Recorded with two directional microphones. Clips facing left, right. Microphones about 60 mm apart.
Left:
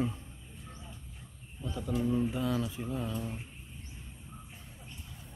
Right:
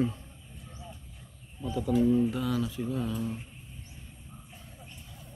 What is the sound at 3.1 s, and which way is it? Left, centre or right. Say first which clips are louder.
Speech: right 4 dB; centre.